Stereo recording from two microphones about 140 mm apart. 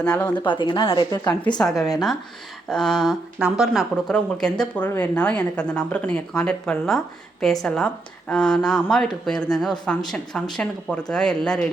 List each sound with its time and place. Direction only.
0.0 s speech: 15° left (ahead or behind)
0.4 s speech: 35° left (ahead or behind)
1.5 s speech: 5° left (ahead or behind)